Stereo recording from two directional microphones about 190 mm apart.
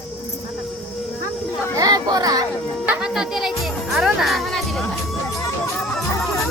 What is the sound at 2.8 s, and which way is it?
Music, 5° right (ahead or behind).